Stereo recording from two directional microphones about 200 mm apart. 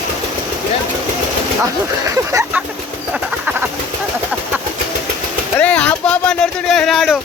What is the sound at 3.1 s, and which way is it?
Bird, 5° right (ahead or behind).